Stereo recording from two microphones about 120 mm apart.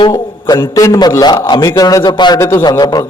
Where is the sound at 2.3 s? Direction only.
25° left (ahead or behind).